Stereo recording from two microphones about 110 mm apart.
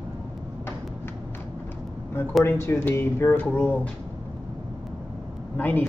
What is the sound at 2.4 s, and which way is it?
Speech, 25° left (ahead or behind).